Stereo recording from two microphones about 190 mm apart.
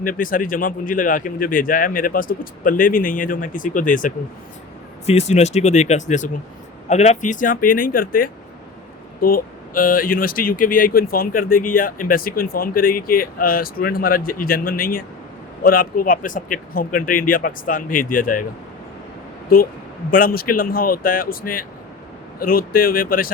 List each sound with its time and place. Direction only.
0.0 s speech: 45° left (ahead or behind)
19.5 s speech: 50° left (ahead or behind)